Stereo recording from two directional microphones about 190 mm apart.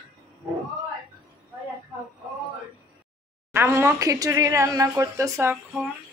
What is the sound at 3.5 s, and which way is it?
Speech, 15° right (ahead or behind).